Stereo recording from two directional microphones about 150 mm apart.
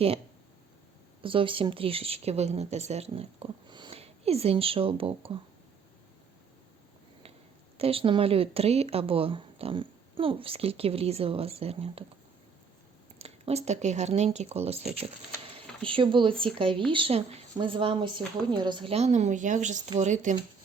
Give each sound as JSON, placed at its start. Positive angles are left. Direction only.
{"t": 1.2, "sound": "speech", "side_deg": -35}
{"t": 7.8, "sound": "speech", "side_deg": -40}
{"t": 13.1, "sound": "speech", "side_deg": -45}